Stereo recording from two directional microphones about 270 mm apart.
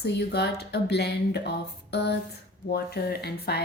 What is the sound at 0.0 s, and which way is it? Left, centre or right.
Speech, left.